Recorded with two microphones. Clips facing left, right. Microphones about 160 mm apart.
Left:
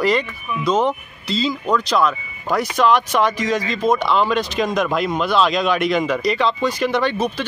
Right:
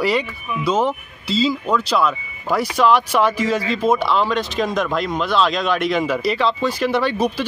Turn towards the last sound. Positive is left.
turn(degrees=-10)  # may be behind; listen again after turning